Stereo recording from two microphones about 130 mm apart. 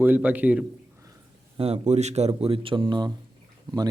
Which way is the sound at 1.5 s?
50° right (ahead or behind).